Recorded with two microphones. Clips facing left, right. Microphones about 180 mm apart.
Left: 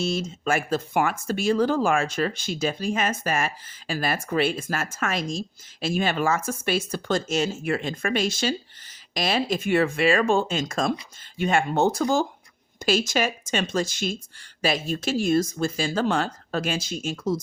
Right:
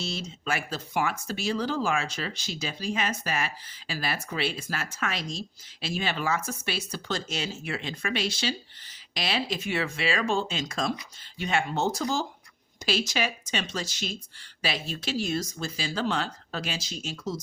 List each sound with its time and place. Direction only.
0.0 s speech: 50° left (ahead or behind)